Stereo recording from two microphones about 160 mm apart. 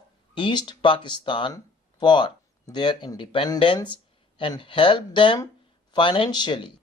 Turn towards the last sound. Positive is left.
turn(degrees=30)  # may be behind; listen again after turning